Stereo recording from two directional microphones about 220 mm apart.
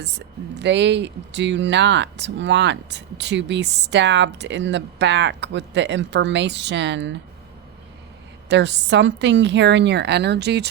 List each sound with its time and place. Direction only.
0.6 s speech: 50° right (ahead or behind)
8.4 s speech: 50° right (ahead or behind)